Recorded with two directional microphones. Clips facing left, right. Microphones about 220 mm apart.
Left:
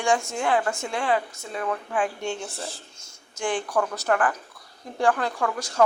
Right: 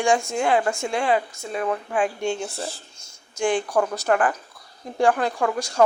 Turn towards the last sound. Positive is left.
turn(degrees=-15)  # may be behind; listen again after turning